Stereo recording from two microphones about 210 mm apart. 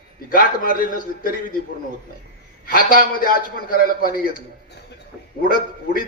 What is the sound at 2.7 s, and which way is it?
A man's voice, 40° left (ahead or behind).